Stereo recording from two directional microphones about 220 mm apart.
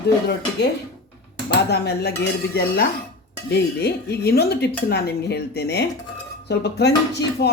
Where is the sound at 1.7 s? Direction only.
50° left (ahead or behind).